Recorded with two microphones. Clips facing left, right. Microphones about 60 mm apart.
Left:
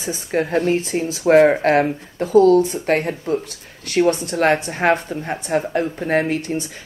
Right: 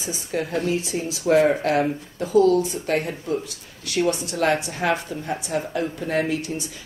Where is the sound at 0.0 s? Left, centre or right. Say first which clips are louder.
Left 5 dB; left.